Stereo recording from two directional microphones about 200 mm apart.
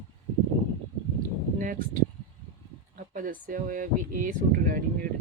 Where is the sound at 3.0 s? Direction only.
45° right (ahead or behind).